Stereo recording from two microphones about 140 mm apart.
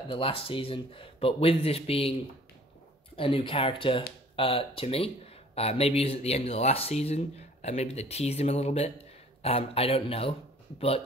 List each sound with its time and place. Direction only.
0.1 s speech: 40° left (ahead or behind)
3.2 s speech: 40° left (ahead or behind)